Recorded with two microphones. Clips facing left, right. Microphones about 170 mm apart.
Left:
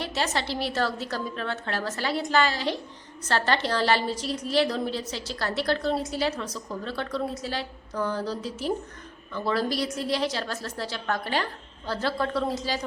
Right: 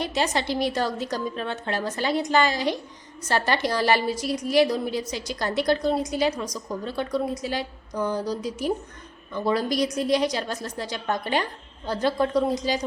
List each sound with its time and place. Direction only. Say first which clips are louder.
0.0 s a woman's voice: right 3 dB; 15° right (ahead or behind)